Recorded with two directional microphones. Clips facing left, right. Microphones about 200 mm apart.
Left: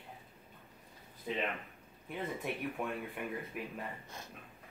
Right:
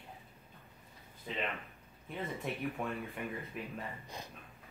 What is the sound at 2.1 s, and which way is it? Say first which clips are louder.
Speech: left 1 dB; 5° left (ahead or behind).